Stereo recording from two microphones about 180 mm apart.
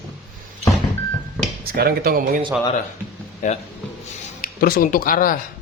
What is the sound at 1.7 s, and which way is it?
Speech, 55° right (ahead or behind).